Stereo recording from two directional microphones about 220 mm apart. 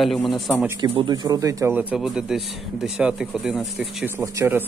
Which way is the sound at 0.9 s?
20° right (ahead or behind).